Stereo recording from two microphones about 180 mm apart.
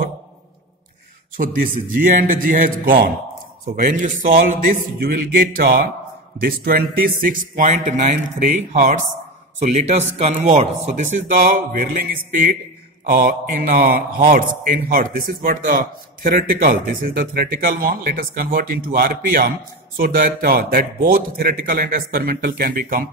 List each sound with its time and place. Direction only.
1.3 s speech: 50° right (ahead or behind)